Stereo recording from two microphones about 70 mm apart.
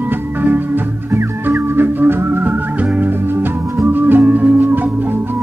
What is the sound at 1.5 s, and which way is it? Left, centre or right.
Music, right.